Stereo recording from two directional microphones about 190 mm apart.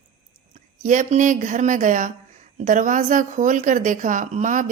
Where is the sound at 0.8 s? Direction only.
40° right (ahead or behind).